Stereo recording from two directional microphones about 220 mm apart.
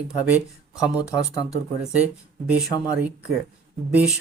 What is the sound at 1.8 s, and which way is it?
Speech, 5° right (ahead or behind).